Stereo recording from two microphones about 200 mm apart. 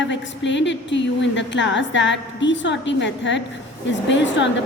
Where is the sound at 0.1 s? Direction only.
65° left (ahead or behind).